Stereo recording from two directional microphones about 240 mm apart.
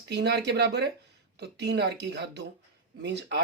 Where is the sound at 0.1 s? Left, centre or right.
Right.